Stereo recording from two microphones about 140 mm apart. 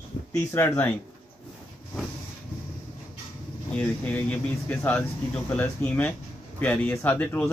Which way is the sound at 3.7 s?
10° left (ahead or behind).